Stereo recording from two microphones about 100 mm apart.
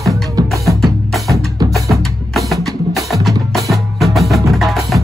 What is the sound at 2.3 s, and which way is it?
Music, centre (ahead or behind).